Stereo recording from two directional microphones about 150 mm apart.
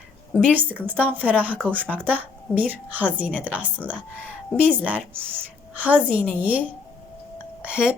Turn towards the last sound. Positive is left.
turn(degrees=-5)  # may be behind; listen again after turning